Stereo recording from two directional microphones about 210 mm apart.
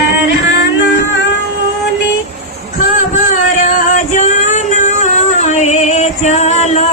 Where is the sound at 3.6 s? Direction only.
40° left (ahead or behind).